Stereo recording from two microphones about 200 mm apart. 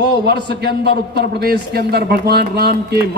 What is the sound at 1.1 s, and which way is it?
A man's voice, 50° right (ahead or behind).